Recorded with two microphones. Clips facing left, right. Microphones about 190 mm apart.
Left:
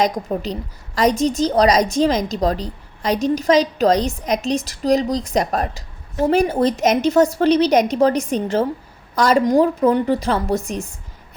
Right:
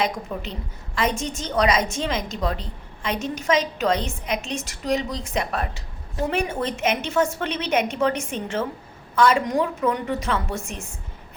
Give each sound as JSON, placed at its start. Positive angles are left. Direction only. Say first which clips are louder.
{"t": 0.0, "sound": "a woman's voice", "louder": "left 6 dB", "side_deg": 40}